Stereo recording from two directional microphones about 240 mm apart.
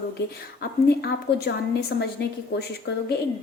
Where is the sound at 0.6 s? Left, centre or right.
Left.